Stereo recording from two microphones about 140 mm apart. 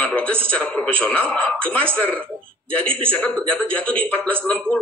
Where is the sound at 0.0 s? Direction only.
10° left (ahead or behind).